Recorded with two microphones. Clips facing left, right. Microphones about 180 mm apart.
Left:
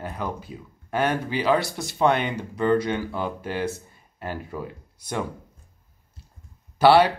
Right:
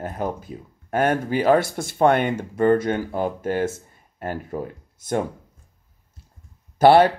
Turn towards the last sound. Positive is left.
turn(degrees=-45)  # may be behind; listen again after turning